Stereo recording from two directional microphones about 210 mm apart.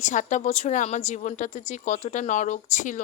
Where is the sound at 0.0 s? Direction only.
35° left (ahead or behind).